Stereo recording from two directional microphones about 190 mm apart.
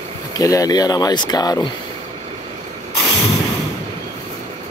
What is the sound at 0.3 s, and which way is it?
Speech, 20° left (ahead or behind).